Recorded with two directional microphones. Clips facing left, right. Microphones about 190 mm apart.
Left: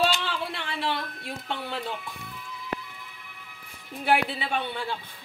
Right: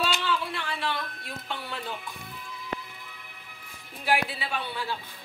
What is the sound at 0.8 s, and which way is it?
Speech, 25° left (ahead or behind).